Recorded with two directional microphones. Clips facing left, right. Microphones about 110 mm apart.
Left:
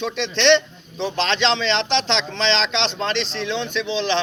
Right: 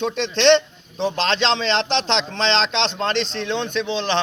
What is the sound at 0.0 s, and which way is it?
A man's voice, 40° right (ahead or behind).